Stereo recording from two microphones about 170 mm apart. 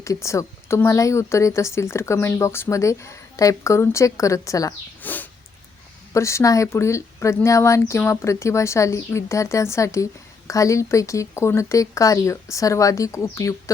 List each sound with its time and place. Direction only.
0.0 s speech: 15° left (ahead or behind)